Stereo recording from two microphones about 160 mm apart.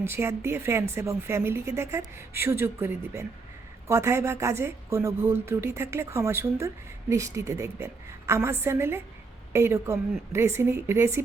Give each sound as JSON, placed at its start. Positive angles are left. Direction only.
{"t": 0.0, "sound": "speech", "side_deg": -15}